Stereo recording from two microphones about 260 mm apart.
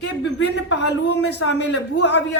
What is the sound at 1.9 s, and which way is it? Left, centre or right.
Speech, left.